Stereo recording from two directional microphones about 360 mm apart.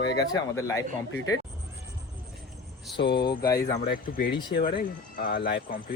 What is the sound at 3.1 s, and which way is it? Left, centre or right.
Speech, centre.